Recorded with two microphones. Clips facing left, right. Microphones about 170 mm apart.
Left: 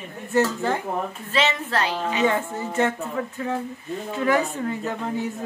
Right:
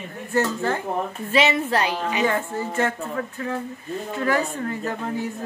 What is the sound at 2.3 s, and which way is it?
Speech, 20° left (ahead or behind).